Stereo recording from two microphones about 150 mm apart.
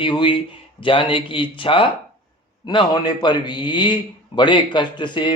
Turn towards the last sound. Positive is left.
turn(degrees=30)  # may be behind; listen again after turning